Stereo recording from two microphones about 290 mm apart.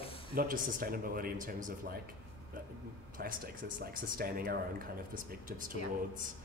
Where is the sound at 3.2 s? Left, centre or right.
Right.